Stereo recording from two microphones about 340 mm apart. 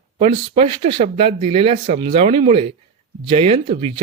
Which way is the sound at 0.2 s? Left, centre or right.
Centre.